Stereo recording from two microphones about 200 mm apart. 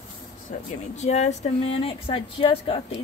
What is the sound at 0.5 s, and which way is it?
Speech, 35° left (ahead or behind).